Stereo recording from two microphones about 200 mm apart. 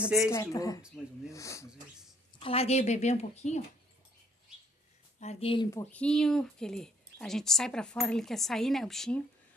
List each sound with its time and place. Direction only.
0.3 s speech: 15° left (ahead or behind)
2.3 s a woman's voice: 30° left (ahead or behind)
5.2 s speech: 30° left (ahead or behind)
5.7 s speech: 10° left (ahead or behind)